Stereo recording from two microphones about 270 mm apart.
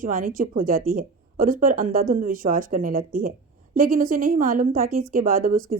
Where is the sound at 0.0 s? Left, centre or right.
Right.